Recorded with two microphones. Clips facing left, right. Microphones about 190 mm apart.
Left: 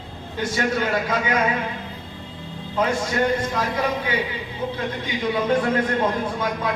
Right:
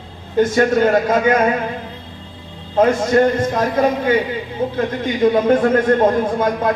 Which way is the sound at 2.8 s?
50° right (ahead or behind).